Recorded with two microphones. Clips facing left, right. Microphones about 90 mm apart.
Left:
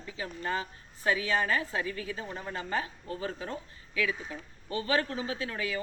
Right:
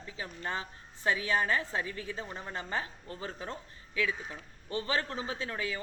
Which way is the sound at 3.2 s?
25° right (ahead or behind).